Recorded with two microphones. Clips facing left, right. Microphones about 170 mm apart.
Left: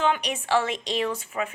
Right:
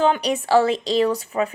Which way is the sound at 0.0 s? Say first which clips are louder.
Right 6 dB; 35° right (ahead or behind).